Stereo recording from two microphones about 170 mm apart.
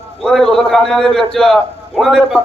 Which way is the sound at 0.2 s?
Centre (ahead or behind).